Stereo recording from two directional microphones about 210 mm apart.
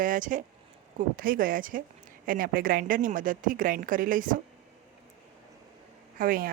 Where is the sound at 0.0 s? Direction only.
40° right (ahead or behind).